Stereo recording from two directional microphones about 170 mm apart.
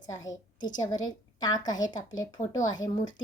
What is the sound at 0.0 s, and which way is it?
A woman's voice, 20° left (ahead or behind).